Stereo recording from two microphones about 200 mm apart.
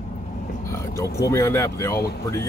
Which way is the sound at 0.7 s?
15° left (ahead or behind).